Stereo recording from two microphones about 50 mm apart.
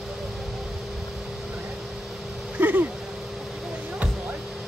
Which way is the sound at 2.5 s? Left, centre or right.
Right.